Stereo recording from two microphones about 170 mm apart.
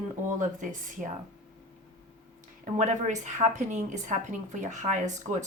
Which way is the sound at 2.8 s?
45° right (ahead or behind).